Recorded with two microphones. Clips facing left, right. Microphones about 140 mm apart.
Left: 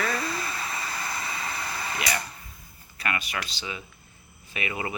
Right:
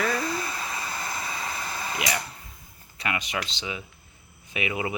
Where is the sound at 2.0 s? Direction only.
15° right (ahead or behind).